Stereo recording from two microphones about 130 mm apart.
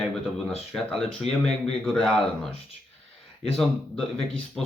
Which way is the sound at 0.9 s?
Centre (ahead or behind).